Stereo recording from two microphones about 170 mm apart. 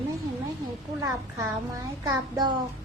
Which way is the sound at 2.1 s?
25° right (ahead or behind).